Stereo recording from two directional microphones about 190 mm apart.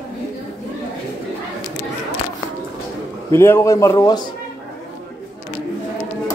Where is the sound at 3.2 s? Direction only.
15° left (ahead or behind).